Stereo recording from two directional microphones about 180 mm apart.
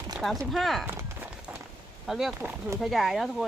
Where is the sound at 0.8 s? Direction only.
10° right (ahead or behind).